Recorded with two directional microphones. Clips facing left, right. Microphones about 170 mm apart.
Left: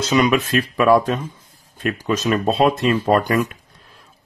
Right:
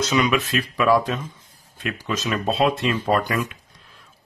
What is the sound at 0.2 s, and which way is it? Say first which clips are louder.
Speech: left 4 dB; 45° left (ahead or behind).